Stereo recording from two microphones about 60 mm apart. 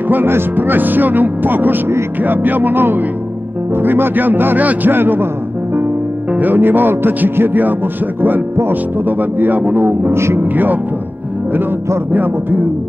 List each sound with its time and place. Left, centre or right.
0.1 s speech: right
6.3 s speech: right
12.1 s speech: right